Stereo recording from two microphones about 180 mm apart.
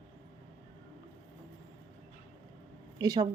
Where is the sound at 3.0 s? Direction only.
20° right (ahead or behind).